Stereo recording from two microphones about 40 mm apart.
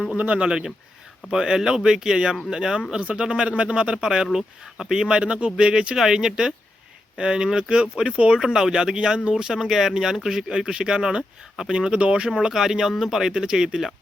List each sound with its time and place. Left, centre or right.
0.2 s speech: right
0.4 s speech: centre
11.9 s speech: right
12.5 s speech: centre